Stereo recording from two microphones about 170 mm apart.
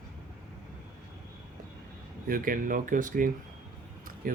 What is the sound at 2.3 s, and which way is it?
Speech, 55° right (ahead or behind).